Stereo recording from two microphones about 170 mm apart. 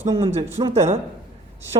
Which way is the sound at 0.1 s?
35° right (ahead or behind).